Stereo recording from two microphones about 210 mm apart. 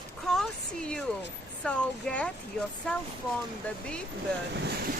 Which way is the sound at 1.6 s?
5° left (ahead or behind).